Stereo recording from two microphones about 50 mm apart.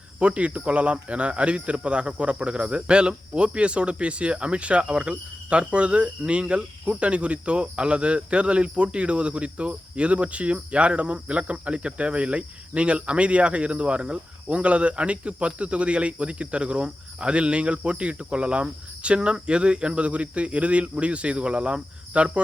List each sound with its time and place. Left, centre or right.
0.2 s speech: right